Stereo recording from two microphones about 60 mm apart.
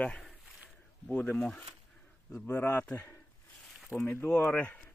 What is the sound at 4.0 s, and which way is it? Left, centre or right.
Speech, left.